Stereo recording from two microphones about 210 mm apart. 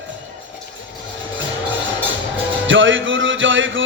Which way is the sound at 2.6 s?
65° right (ahead or behind).